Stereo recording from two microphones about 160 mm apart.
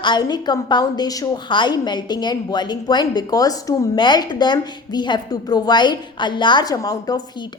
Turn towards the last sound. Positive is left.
turn(degrees=20)  # may be behind; listen again after turning